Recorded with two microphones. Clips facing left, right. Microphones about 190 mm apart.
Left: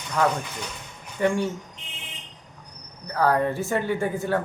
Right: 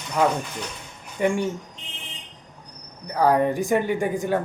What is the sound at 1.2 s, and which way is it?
Speech, 15° right (ahead or behind).